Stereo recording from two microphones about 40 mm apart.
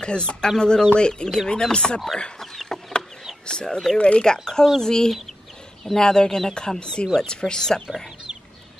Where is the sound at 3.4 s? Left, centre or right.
Left.